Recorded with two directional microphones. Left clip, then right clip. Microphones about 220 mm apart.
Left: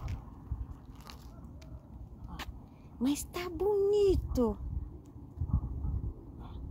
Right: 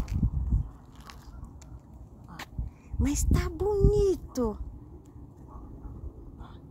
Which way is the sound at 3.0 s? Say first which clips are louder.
Right 3 dB; 15° right (ahead or behind).